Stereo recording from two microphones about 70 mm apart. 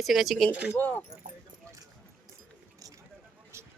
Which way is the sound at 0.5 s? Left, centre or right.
Centre.